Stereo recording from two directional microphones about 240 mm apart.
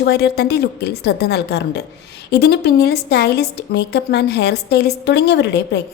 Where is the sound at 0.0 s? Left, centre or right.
Left.